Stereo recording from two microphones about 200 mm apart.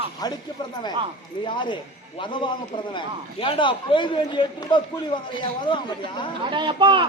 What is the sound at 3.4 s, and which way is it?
A man's voice, 25° left (ahead or behind).